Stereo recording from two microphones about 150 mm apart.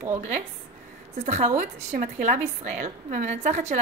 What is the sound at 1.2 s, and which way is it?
A woman's voice, 50° right (ahead or behind).